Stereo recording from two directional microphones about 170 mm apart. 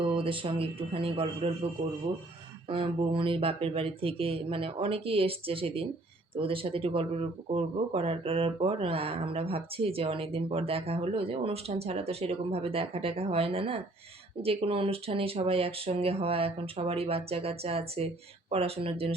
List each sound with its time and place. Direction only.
0.0 s speech: 30° right (ahead or behind)